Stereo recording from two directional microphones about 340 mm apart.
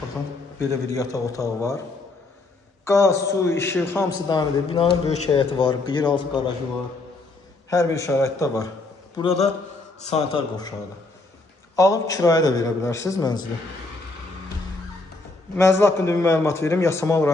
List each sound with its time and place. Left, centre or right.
0.7 s a man's voice: centre
2.8 s a man's voice: centre
7.7 s a man's voice: centre
11.7 s a man's voice: centre
15.5 s a man's voice: centre